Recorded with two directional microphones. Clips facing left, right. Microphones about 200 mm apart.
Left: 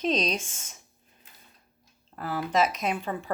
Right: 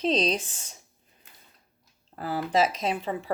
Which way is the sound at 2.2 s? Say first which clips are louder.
Right 1 dB; 35° right (ahead or behind).